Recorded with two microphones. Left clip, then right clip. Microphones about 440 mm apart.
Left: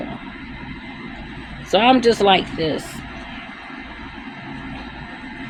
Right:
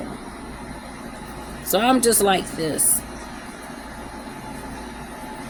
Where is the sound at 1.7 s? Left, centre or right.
Right.